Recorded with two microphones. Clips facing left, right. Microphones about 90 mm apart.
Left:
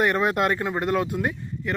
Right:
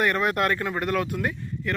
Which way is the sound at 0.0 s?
20° left (ahead or behind).